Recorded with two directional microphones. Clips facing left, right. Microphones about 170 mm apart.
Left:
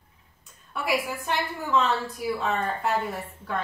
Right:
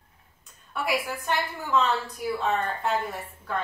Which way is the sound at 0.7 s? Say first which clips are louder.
Left 1 dB; centre (ahead or behind).